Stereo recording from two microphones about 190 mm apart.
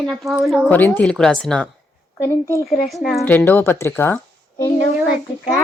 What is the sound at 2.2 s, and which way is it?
Speech, 15° left (ahead or behind).